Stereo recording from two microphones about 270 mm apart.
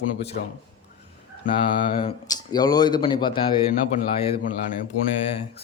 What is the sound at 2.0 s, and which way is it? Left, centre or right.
Speech, centre.